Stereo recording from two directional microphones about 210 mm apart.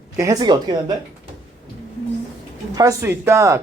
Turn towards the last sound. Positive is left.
turn(degrees=-15)  # may be behind; listen again after turning